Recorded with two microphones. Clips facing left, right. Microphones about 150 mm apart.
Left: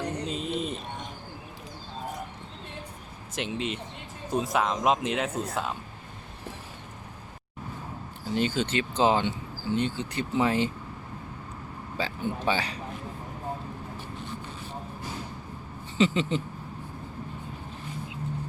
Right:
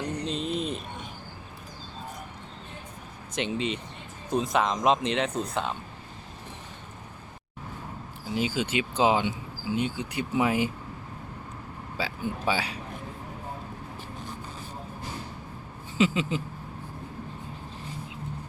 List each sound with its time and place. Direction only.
0.3 s a sound: 5° left (ahead or behind)
3.3 s speech: 5° left (ahead or behind)
8.3 s speech: 5° right (ahead or behind)
11.9 s speech: 5° right (ahead or behind)
16.0 s speech: 5° right (ahead or behind)